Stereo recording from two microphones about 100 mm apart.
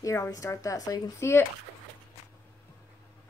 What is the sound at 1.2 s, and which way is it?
Speech, 25° left (ahead or behind).